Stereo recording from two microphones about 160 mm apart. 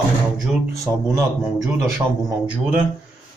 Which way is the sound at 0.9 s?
10° right (ahead or behind).